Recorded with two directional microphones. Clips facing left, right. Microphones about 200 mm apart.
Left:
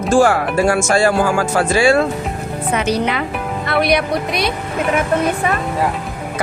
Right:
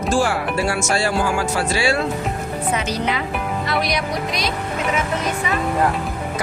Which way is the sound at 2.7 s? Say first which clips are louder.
Left 6 dB; 65° left (ahead or behind).